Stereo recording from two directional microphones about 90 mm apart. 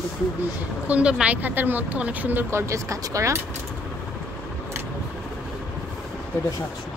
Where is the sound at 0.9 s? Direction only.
10° right (ahead or behind); by 3.4 s 35° right (ahead or behind).